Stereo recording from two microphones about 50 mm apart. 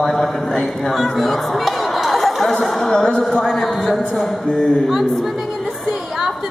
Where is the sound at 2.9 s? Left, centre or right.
Centre.